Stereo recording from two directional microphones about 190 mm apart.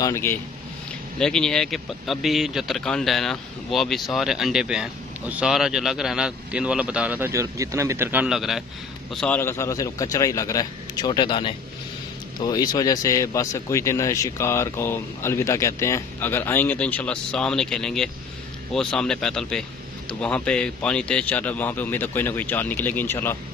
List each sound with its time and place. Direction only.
0.0 s speech: 15° left (ahead or behind)